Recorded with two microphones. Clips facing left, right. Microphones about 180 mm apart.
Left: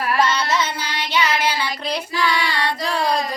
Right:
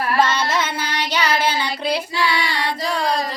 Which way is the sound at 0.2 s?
50° right (ahead or behind).